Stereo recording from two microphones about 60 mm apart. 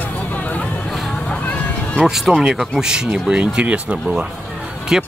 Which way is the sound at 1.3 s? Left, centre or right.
Centre.